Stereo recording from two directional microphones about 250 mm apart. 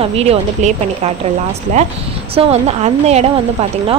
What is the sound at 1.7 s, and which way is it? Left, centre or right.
Speech, right.